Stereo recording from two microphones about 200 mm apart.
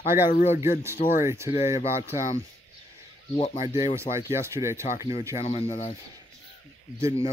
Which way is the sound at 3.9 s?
15° right (ahead or behind).